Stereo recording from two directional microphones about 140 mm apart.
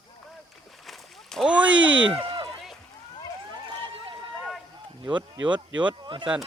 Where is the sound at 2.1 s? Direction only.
35° right (ahead or behind).